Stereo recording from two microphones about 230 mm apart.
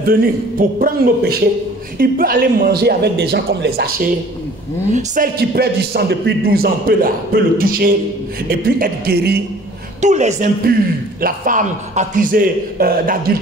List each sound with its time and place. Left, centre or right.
0.0 s a man's voice: right
10.0 s a man's voice: right